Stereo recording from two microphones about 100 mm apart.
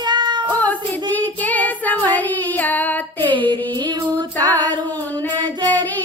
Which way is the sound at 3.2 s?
50° right (ahead or behind).